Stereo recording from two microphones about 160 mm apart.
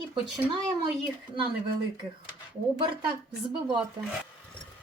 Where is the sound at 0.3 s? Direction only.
5° right (ahead or behind).